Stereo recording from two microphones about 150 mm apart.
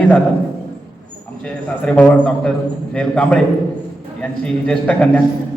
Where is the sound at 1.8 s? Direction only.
5° left (ahead or behind).